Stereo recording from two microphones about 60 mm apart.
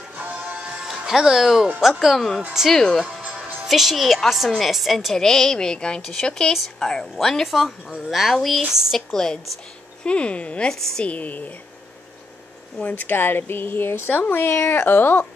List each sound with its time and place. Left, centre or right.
0.1 s music: right
0.9 s speech: centre
3.1 s speech: centre
6.5 s speech: centre
9.1 s speech: centre
10.7 s speech: centre
11.1 s speech: left
12.8 s speech: left